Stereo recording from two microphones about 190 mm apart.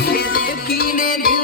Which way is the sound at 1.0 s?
50° left (ahead or behind).